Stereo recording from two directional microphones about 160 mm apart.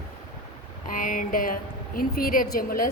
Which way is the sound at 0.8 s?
55° left (ahead or behind).